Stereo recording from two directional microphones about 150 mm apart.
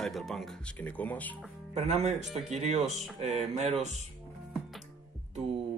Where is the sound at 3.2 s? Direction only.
45° right (ahead or behind).